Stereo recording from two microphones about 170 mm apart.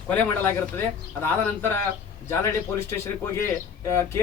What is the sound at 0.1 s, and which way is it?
Speech, 10° left (ahead or behind).